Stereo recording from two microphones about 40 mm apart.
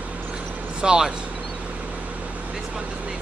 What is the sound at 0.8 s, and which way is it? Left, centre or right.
Speech, right.